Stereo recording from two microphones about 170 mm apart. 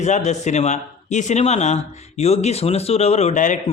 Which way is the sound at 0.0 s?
45° left (ahead or behind).